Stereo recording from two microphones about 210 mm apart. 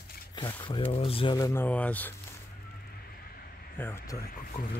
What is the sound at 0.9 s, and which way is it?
Speech, 25° left (ahead or behind).